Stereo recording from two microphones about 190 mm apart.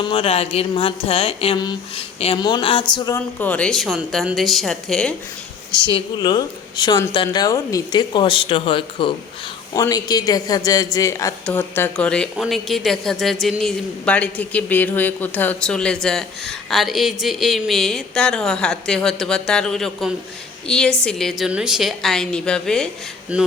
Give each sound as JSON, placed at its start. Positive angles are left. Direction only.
{"t": 0.0, "sound": "speech", "side_deg": 30}
{"t": 3.2, "sound": "a woman's voice", "side_deg": 10}
{"t": 5.8, "sound": "a woman's voice", "side_deg": 25}